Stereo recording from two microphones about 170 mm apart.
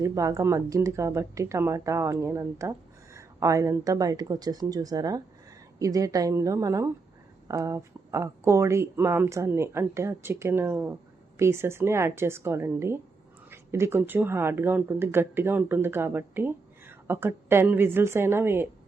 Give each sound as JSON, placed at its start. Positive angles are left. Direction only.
{"t": 0.0, "sound": "a woman's voice", "side_deg": -20}